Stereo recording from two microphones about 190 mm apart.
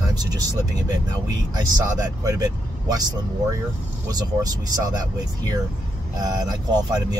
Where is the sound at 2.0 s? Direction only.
20° right (ahead or behind).